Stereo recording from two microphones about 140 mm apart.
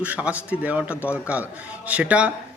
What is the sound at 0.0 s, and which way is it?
Speech, 10° right (ahead or behind).